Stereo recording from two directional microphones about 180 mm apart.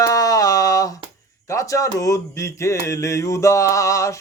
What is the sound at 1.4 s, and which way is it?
A man's voice, 15° left (ahead or behind).